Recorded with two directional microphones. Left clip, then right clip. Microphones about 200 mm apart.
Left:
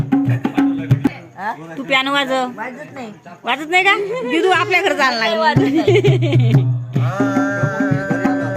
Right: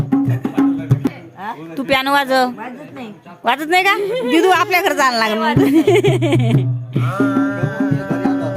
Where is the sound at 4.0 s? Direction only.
55° right (ahead or behind).